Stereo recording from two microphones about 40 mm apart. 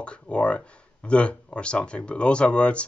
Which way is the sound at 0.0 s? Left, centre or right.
Left.